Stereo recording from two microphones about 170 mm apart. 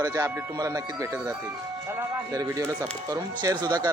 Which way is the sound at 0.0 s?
20° right (ahead or behind).